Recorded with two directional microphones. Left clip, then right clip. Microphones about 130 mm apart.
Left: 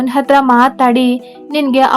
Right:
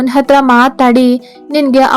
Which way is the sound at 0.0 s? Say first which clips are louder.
Right 2 dB; 35° right (ahead or behind).